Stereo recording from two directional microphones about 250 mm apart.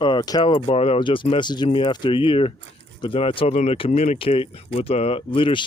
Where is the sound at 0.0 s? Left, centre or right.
Centre.